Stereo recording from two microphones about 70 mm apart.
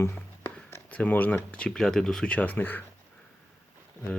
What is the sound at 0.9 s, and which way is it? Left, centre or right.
Speech, left.